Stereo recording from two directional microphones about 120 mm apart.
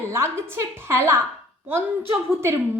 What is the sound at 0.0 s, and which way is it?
A woman's voice, 20° right (ahead or behind).